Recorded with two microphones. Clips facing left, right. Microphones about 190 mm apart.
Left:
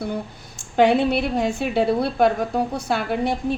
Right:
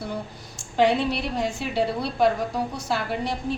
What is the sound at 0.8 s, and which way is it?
A woman's voice, 55° left (ahead or behind).